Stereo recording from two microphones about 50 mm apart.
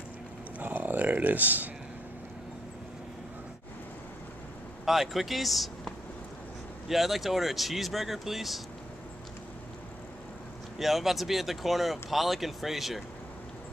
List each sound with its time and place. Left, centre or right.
0.6 s a sound: right
4.8 s speech: centre
6.9 s speech: centre
10.8 s speech: centre